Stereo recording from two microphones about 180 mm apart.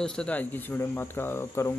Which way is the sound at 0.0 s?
5° left (ahead or behind).